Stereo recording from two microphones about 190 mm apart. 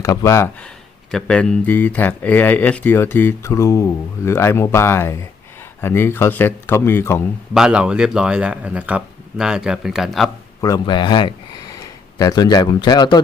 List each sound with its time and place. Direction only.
0.0 s speech: 15° left (ahead or behind)
7.5 s speech: 5° right (ahead or behind)
10.6 s speech: 20° left (ahead or behind)